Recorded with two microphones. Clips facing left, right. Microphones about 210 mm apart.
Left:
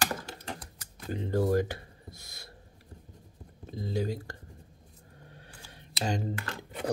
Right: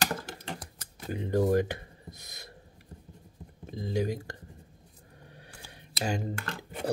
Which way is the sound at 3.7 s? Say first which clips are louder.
Right 2 dB; 15° right (ahead or behind).